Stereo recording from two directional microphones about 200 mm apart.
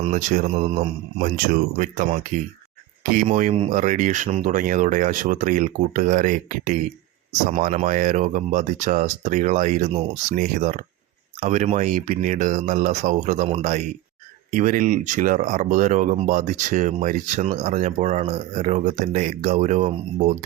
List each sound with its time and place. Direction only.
0.0 s speech: 35° right (ahead or behind)